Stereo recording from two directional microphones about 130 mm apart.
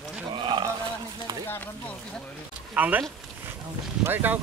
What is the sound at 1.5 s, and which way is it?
Speech, 10° left (ahead or behind).